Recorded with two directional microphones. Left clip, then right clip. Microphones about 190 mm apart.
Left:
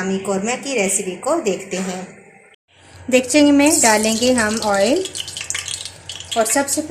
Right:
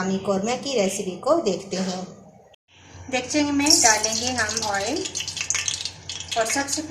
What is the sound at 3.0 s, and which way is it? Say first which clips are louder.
Speech: left 10 dB; 55° left (ahead or behind).